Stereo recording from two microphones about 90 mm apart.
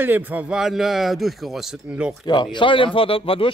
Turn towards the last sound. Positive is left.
turn(degrees=90)